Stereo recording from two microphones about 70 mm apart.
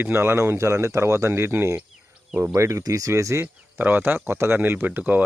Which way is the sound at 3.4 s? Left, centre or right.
Right.